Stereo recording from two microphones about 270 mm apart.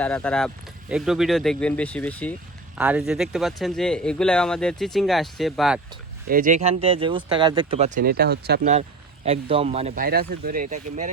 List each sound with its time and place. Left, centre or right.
0.0 s speech: centre
2.7 s speech: centre
6.2 s speech: right
8.7 s speech: right